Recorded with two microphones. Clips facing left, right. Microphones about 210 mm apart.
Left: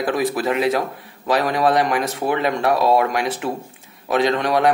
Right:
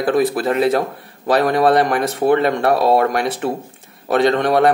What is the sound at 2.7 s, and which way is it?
Speech, 30° right (ahead or behind).